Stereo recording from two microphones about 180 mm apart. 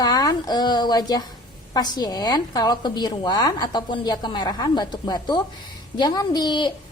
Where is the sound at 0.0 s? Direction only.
20° left (ahead or behind).